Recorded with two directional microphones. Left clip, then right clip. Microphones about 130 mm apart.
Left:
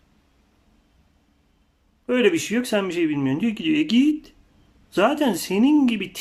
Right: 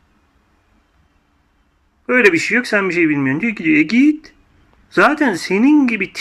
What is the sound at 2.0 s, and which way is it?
Speech, 30° left (ahead or behind).